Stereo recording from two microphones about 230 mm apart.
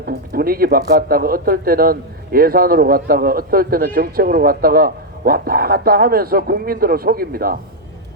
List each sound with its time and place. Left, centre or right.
0.0 s a man's voice: right